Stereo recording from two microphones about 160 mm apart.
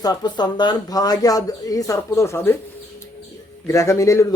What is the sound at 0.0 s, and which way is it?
Speech, 25° left (ahead or behind).